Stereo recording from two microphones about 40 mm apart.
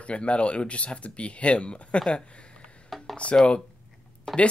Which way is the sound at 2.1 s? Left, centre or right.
Left.